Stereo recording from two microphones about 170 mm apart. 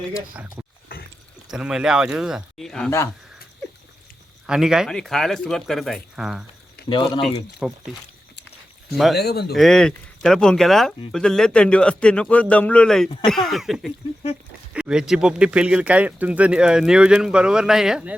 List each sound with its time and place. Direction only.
0.1 s speech: 5° right (ahead or behind)
4.4 s speech: 5° right (ahead or behind)
6.8 s speech: 30° left (ahead or behind)
7.6 s speech: 5° right (ahead or behind)
8.9 s speech: centre (ahead or behind)
9.1 s speech: 70° left (ahead or behind)
9.6 s speech: 5° left (ahead or behind)